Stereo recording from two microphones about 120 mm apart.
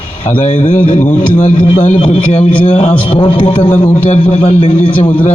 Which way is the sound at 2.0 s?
65° left (ahead or behind).